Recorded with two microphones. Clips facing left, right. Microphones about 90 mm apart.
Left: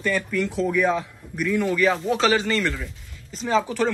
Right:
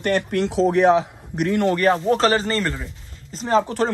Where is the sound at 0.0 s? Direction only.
65° right (ahead or behind).